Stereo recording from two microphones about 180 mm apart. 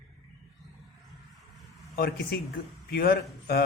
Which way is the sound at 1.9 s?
60° left (ahead or behind).